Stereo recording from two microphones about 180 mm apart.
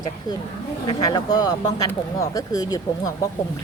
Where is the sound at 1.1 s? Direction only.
20° left (ahead or behind).